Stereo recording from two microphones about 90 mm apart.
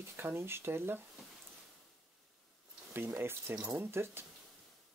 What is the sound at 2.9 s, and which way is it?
Speech, 25° right (ahead or behind).